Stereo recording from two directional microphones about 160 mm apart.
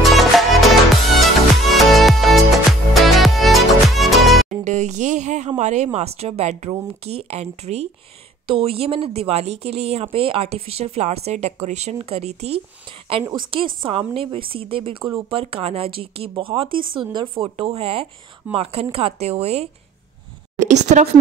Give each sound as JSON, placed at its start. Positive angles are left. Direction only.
{"t": 0.0, "sound": "music", "side_deg": 0}
{"t": 4.5, "sound": "a sound", "side_deg": -50}
{"t": 5.6, "sound": "speech", "side_deg": -45}
{"t": 13.8, "sound": "a woman's voice", "side_deg": -35}